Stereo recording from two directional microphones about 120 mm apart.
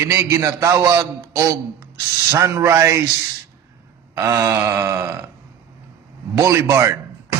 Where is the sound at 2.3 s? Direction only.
25° right (ahead or behind).